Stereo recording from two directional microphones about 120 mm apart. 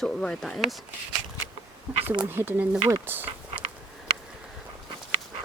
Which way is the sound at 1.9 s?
55° right (ahead or behind).